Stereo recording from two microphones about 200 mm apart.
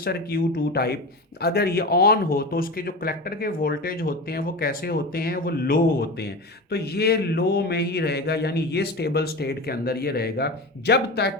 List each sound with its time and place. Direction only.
0.0 s speech: 50° left (ahead or behind)